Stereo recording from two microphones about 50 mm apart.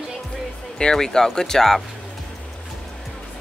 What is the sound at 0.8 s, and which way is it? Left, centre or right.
Speech, centre.